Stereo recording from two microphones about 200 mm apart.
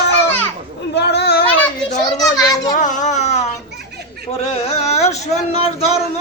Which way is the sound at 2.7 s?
40° left (ahead or behind).